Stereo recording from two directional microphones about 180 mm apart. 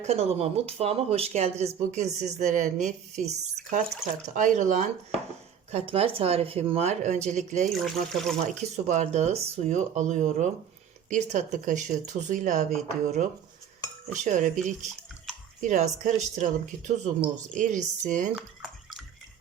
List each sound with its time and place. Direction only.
0.0 s speech: 35° right (ahead or behind)
7.7 s speech: centre (ahead or behind)
8.4 s speech: 40° right (ahead or behind)
18.3 s a sound: centre (ahead or behind)